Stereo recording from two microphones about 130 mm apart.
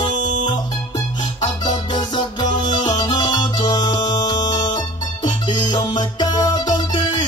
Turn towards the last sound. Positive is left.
turn(degrees=35)  # may be behind; listen again after turning